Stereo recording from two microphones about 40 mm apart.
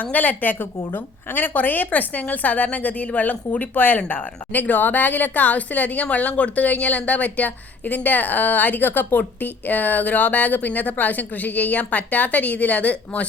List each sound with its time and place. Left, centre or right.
0.0 s a woman's voice: left
0.8 s a woman's voice: left